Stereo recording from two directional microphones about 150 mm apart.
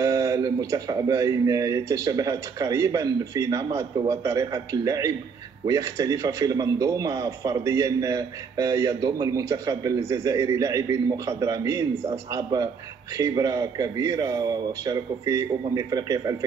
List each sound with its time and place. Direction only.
0.0 s a man's voice: 20° right (ahead or behind)